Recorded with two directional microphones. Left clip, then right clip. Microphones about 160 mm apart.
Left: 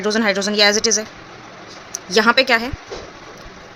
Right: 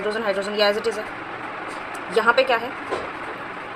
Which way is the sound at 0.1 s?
90° left.